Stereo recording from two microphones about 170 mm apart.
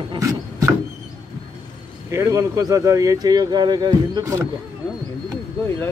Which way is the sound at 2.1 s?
20° right (ahead or behind).